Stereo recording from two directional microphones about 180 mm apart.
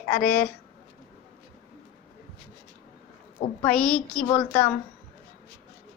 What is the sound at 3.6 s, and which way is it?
Speech, 5° left (ahead or behind).